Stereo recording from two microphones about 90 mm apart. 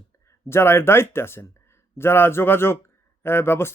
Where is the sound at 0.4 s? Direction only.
25° left (ahead or behind).